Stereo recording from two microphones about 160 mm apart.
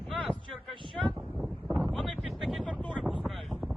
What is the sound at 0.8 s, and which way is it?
Wind noise, 30° right (ahead or behind).